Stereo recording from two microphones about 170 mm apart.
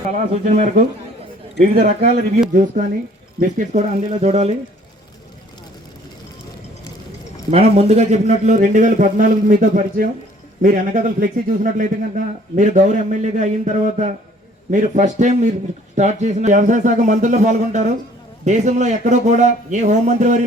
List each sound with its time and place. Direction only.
0.1 s a man's voice: 50° right (ahead or behind)
1.6 s speech: 60° right (ahead or behind)
2.5 s a man's voice: 45° right (ahead or behind)
7.5 s a man's voice: 40° right (ahead or behind)